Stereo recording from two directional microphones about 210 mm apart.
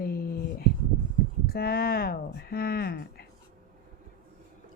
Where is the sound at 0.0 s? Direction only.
45° left (ahead or behind).